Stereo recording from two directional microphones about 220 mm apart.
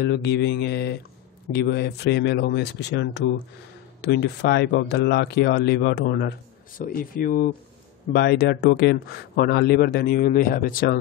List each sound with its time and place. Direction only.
0.0 s speech: 50° left (ahead or behind)